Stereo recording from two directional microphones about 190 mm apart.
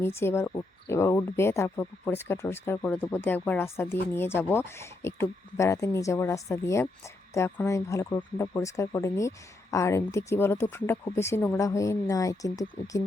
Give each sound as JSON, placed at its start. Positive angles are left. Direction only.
{"t": 0.0, "sound": "speech", "side_deg": 15}